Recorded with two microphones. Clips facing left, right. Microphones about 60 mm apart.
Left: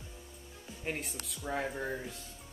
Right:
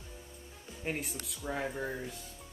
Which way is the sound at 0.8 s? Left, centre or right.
Centre.